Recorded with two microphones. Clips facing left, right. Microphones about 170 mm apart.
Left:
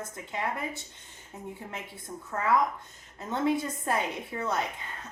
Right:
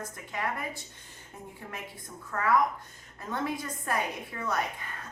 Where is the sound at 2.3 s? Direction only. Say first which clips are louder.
Even; 25° left (ahead or behind).